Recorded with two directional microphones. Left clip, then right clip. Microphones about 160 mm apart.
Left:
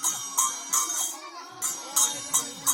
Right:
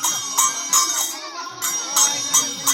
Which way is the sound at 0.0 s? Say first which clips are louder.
Right 8 dB; 15° left (ahead or behind).